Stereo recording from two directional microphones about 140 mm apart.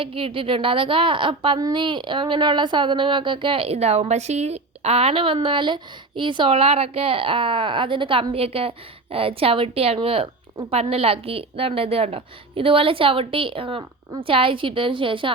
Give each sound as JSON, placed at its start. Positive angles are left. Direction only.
{"t": 0.0, "sound": "a woman's voice", "side_deg": -40}